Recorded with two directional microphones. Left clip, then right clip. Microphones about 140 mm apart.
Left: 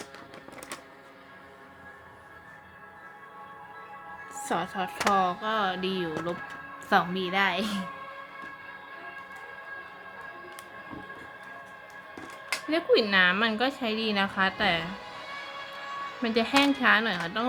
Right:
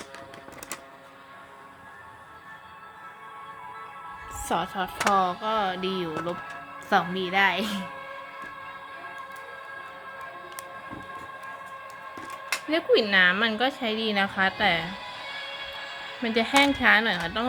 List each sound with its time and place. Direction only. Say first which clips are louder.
4.4 s a woman's voice: right 2 dB; 10° right (ahead or behind)
12.6 s a woman's voice: right 1 dB; 15° right (ahead or behind)
14.8 s music: right 3 dB; 45° right (ahead or behind)
16.2 s a woman's voice: right 3 dB; 10° right (ahead or behind)